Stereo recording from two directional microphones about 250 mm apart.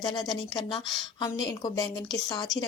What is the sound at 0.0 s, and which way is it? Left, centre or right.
Speech, centre.